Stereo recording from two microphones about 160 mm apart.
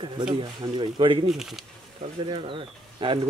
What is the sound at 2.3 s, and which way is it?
Speech, 30° right (ahead or behind).